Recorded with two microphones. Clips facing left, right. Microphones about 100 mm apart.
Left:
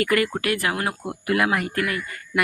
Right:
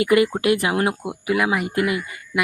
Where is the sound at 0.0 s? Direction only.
20° right (ahead or behind).